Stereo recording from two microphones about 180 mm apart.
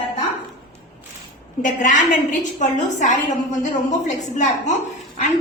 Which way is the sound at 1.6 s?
45° left (ahead or behind).